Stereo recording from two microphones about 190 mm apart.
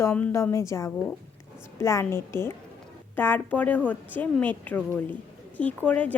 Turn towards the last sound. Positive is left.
turn(degrees=5)  # may be behind; listen again after turning